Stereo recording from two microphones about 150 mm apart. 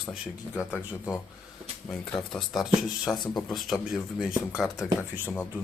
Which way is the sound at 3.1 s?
30° left (ahead or behind).